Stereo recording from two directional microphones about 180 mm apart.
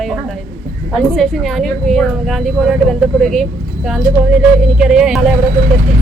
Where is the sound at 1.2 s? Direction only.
Centre (ahead or behind).